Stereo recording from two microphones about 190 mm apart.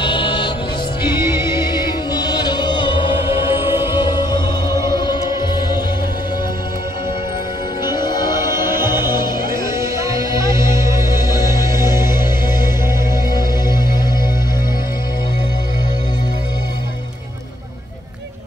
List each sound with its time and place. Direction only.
0.0 s music: 25° left (ahead or behind)
1.1 s music: 15° right (ahead or behind)
1.7 s music: 20° left (ahead or behind)
7.8 s music: 20° left (ahead or behind)
8.5 s music: 10° right (ahead or behind)
13.3 s music: 20° left (ahead or behind)